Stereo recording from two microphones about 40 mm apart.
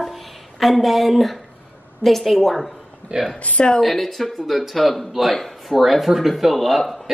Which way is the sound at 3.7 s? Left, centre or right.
Centre.